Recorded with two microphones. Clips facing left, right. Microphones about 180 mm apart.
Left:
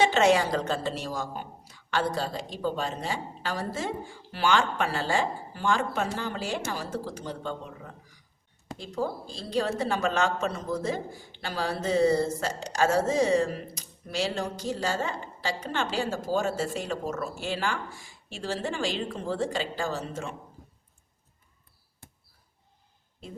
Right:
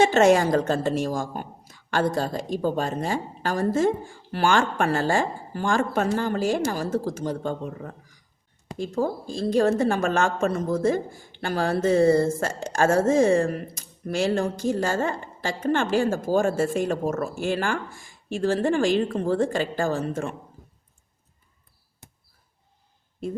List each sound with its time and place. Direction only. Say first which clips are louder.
0.0 s a woman's voice: right 5 dB; 45° right (ahead or behind)